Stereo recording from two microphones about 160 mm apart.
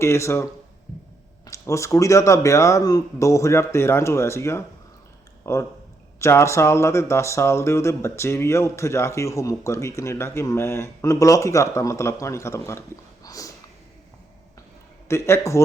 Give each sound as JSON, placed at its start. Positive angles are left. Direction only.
{"t": 0.0, "sound": "speech", "side_deg": 15}
{"t": 1.5, "sound": "speech", "side_deg": 20}
{"t": 5.4, "sound": "a sound", "side_deg": 15}
{"t": 6.1, "sound": "speech", "side_deg": 15}
{"t": 13.2, "sound": "a sound", "side_deg": 20}
{"t": 15.0, "sound": "speech", "side_deg": 15}